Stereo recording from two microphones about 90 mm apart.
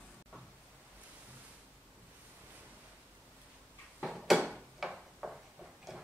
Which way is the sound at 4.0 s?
5° right (ahead or behind).